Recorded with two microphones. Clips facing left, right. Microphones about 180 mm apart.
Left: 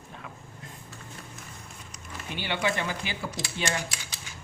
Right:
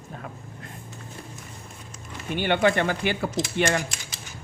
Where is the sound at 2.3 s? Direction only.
55° right (ahead or behind).